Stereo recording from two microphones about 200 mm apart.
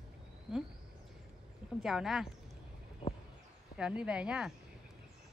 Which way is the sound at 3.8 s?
5° right (ahead or behind).